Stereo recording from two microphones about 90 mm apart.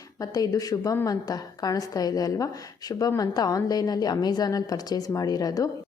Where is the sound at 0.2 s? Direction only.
45° left (ahead or behind).